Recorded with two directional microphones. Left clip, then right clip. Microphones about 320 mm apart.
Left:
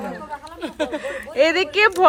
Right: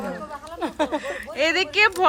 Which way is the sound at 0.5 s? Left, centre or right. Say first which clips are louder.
Right 1 dB; right.